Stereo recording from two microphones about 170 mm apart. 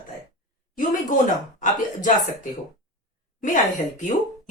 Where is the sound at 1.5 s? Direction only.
50° left (ahead or behind).